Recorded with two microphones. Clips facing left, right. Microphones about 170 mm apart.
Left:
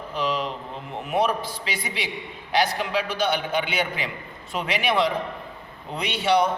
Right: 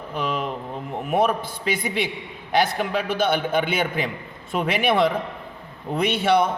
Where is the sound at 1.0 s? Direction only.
50° right (ahead or behind).